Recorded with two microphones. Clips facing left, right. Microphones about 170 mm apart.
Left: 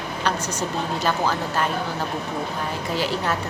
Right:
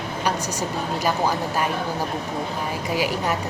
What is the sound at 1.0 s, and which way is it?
Speech, 15° right (ahead or behind).